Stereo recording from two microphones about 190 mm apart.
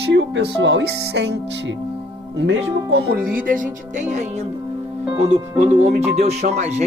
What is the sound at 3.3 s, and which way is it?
Speech, 45° right (ahead or behind).